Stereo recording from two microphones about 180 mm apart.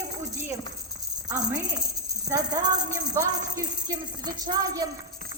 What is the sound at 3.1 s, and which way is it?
Music, 20° right (ahead or behind).